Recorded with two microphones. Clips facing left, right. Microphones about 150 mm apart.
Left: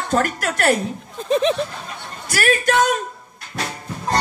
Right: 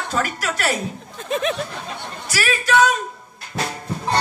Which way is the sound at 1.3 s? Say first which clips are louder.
Left 5 dB; 30° left (ahead or behind).